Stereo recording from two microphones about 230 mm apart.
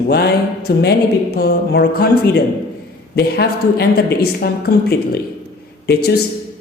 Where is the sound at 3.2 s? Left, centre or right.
Left.